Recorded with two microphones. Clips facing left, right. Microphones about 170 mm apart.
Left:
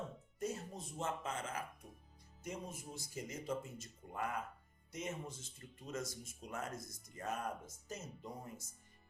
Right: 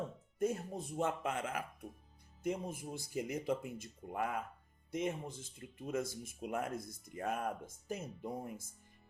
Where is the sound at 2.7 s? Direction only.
55° right (ahead or behind).